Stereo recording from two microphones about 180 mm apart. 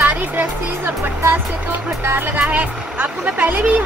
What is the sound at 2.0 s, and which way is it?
Speech, 10° right (ahead or behind).